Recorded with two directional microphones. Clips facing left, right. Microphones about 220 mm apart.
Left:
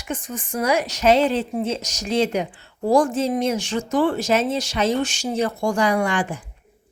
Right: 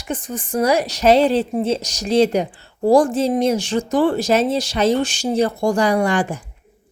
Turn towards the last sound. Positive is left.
turn(degrees=-40)  # may be behind; listen again after turning